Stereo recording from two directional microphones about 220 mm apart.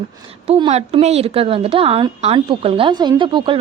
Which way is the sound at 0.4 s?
25° right (ahead or behind).